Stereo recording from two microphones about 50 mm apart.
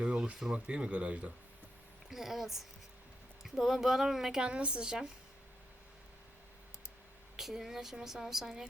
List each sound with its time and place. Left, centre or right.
0.0 s a sound: right
0.5 s speech: right
2.0 s speech: centre
4.4 s speech: right
7.3 s speech: centre